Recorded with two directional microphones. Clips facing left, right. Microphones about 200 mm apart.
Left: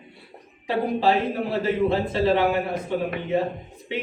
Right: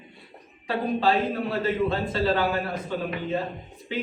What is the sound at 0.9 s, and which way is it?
A man's voice, 25° left (ahead or behind).